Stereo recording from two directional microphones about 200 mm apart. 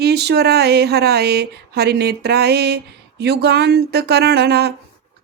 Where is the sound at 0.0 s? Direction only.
55° right (ahead or behind).